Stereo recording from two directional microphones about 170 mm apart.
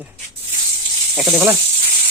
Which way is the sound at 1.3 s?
15° right (ahead or behind).